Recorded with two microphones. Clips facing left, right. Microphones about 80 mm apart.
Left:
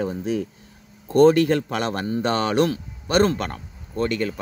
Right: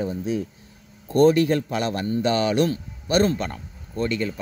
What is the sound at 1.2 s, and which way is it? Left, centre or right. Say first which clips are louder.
Speech: left 2 dB; left.